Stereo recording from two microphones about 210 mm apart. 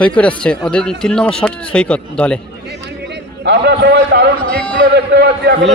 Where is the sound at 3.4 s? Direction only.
55° right (ahead or behind).